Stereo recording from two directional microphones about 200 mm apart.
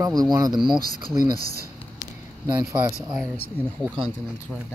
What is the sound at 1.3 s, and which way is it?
Speech, 50° right (ahead or behind).